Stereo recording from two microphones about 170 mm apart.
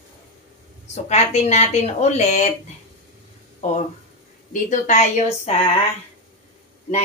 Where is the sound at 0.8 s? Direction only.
40° left (ahead or behind).